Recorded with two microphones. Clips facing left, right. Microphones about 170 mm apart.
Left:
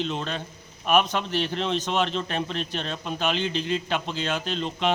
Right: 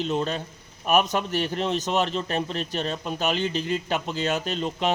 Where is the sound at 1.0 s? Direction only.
45° right (ahead or behind).